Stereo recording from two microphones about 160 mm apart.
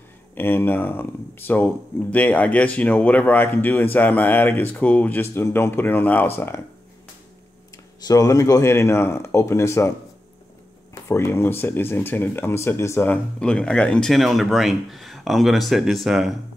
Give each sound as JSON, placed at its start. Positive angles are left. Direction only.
{"t": 0.3, "sound": "speech", "side_deg": 15}
{"t": 8.0, "sound": "speech", "side_deg": 20}
{"t": 11.1, "sound": "speech", "side_deg": 15}